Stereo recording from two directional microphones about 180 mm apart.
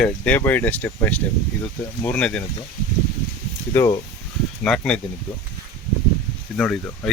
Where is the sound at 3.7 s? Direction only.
15° left (ahead or behind).